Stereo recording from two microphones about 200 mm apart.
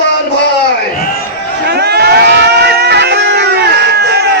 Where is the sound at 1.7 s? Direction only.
55° right (ahead or behind).